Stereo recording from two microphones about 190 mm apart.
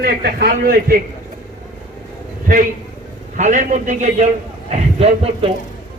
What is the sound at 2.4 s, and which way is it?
A man's voice, 45° right (ahead or behind).